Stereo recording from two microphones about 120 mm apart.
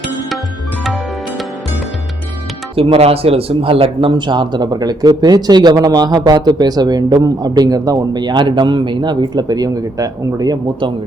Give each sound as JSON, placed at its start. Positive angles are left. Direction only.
{"t": 2.7, "sound": "a man's voice", "side_deg": -50}